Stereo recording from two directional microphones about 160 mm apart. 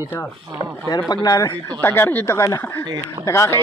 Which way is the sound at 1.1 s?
25° left (ahead or behind).